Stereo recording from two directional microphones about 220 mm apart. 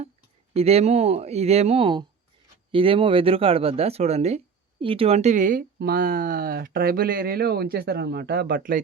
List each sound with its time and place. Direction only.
0.5 s speech: 30° right (ahead or behind)